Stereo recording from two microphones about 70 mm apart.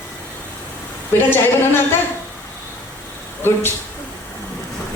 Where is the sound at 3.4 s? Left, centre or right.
Left.